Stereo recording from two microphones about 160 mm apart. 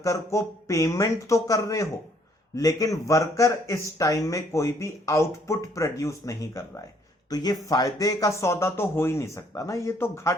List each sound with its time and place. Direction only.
0.0 s speech: 20° left (ahead or behind)